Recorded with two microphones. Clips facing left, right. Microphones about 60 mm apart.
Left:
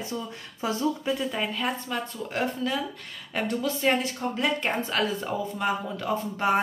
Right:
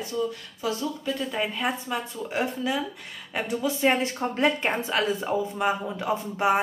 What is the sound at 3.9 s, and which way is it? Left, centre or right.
Speech, right.